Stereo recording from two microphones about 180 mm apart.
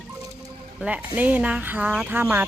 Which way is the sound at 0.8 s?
10° right (ahead or behind).